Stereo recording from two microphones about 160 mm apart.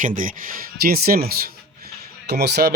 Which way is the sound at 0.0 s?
55° right (ahead or behind).